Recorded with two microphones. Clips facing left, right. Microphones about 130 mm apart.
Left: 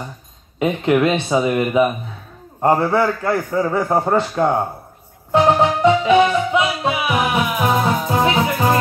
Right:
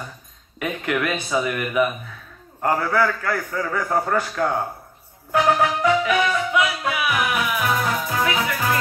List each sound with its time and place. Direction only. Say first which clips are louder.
0.6 s a man's voice: left 8 dB; 25° left (ahead or behind)
5.3 s music: left 4 dB; 25° left (ahead or behind)